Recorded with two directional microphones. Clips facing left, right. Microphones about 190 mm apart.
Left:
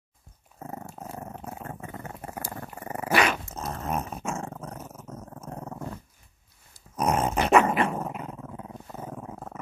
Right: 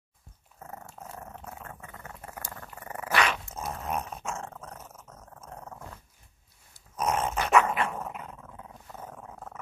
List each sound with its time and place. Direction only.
0.6 s dog: 25° left (ahead or behind)
1.4 s purr: 30° left (ahead or behind)
2.5 s dog: 25° left (ahead or behind)
2.9 s dog: 15° left (ahead or behind)
3.6 s dog: centre (ahead or behind)
5.1 s purr: 30° left (ahead or behind)
7.1 s dog: 35° left (ahead or behind)
8.9 s dog: 10° left (ahead or behind)